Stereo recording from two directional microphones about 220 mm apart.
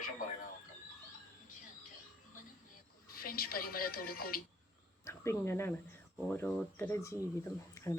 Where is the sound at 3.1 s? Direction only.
40° left (ahead or behind).